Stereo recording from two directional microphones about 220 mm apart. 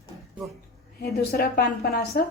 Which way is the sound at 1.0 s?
45° left (ahead or behind).